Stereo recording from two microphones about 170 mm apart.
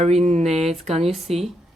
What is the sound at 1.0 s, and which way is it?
Speech, centre (ahead or behind).